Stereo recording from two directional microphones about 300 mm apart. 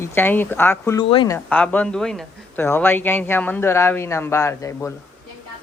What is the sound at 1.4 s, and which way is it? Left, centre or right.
A man's voice, centre.